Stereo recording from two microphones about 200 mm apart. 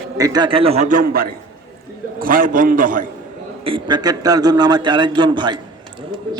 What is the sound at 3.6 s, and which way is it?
A man's voice, 25° right (ahead or behind).